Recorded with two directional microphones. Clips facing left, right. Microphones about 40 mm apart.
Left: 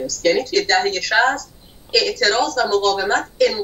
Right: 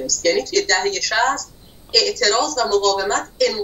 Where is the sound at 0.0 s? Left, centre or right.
Left.